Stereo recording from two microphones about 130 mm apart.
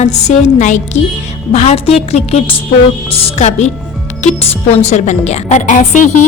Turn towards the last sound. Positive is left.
turn(degrees=75)  # may be behind; listen again after turning